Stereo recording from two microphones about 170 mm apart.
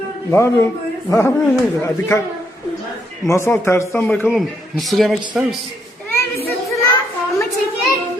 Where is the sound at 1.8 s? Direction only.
15° left (ahead or behind).